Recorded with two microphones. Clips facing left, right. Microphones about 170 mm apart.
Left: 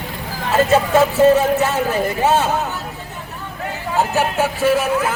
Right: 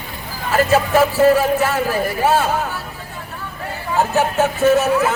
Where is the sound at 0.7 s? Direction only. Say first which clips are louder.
Even; 25° left (ahead or behind).